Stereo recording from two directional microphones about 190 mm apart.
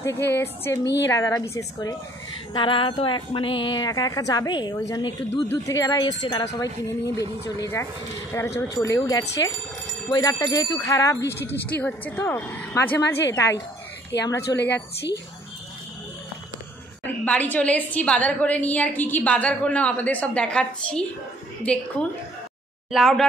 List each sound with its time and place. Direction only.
0.3 s a woman's voice: 15° left (ahead or behind)
9.2 s speech: 65° left (ahead or behind)
10.1 s a woman's voice: 20° left (ahead or behind)
14.4 s a woman's voice: 60° left (ahead or behind)
17.2 s a woman's voice: 10° left (ahead or behind)
22.8 s speech: centre (ahead or behind)